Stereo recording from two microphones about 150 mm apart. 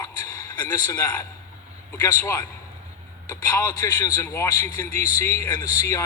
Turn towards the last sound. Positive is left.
turn(degrees=25)  # may be behind; listen again after turning